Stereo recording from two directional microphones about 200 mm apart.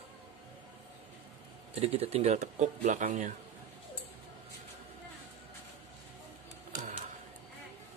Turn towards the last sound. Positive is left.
turn(degrees=-30)  # may be behind; listen again after turning